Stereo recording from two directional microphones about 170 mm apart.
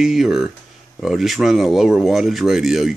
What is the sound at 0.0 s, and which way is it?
Speech, centre (ahead or behind).